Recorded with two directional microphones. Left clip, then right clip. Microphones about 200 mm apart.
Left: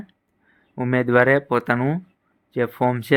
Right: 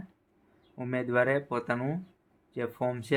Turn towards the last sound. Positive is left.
turn(degrees=45)  # may be behind; listen again after turning